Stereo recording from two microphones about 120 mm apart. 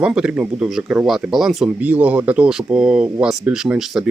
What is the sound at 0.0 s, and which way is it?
Speech, 5° right (ahead or behind).